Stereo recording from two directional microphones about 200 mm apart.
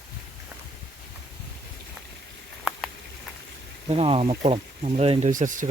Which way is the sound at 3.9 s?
30° right (ahead or behind).